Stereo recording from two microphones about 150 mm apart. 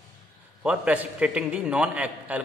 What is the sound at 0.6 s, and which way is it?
A man's voice, 10° right (ahead or behind).